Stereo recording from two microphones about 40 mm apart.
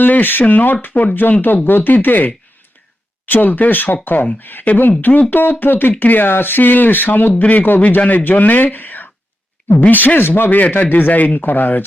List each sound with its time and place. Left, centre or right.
0.0 s speech: left
10.6 s speech: left